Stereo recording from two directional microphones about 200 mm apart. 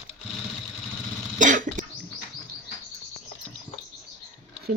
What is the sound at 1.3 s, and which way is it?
Cough, 40° right (ahead or behind).